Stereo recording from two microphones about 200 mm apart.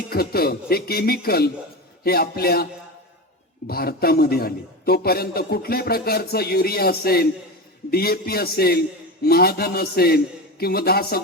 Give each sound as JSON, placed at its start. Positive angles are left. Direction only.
{"t": 0.1, "sound": "a man's voice", "side_deg": 50}
{"t": 3.7, "sound": "a man's voice", "side_deg": 50}